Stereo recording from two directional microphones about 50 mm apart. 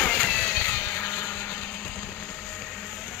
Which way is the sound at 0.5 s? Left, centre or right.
Left.